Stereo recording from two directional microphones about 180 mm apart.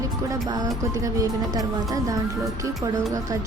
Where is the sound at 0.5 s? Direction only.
20° right (ahead or behind).